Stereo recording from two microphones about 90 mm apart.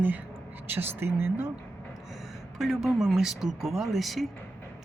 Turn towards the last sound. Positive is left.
turn(degrees=0)  # may be behind; listen again after turning